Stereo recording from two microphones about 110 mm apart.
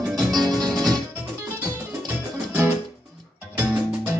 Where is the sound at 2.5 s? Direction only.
15° right (ahead or behind).